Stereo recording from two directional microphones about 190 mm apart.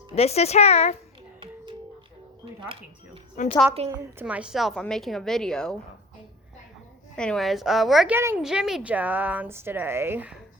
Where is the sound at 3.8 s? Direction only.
35° right (ahead or behind).